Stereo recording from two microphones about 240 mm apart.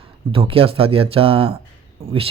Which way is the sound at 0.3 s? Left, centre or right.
Right.